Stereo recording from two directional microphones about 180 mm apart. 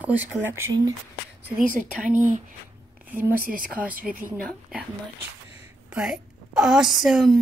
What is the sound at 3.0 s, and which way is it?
Speech, 10° right (ahead or behind).